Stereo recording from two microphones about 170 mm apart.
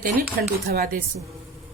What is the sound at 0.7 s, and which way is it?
Speech, 60° right (ahead or behind).